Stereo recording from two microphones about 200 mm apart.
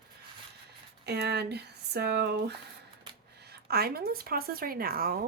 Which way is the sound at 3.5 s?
50° right (ahead or behind).